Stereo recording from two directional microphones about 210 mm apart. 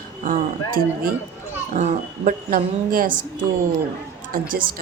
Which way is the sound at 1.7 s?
35° right (ahead or behind).